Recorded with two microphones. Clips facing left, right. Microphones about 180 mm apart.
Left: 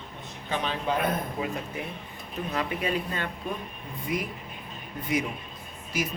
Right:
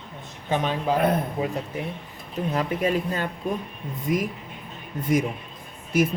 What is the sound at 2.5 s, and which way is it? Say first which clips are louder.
Speech: right 5 dB; 40° right (ahead or behind).